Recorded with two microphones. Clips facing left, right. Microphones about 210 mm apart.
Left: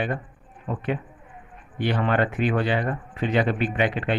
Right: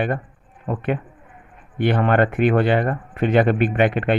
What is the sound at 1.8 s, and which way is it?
Speech, 55° right (ahead or behind).